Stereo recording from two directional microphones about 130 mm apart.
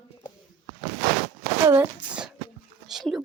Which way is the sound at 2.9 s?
Centre (ahead or behind).